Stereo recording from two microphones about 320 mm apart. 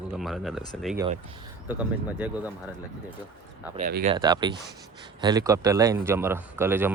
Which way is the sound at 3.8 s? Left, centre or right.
Right.